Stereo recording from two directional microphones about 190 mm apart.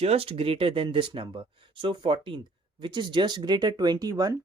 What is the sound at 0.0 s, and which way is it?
Speech, 30° right (ahead or behind).